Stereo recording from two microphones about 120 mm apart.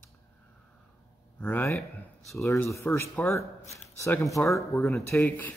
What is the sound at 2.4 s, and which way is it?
Speech, 25° left (ahead or behind).